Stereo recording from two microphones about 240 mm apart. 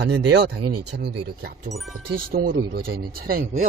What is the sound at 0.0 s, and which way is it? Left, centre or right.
Speech, right.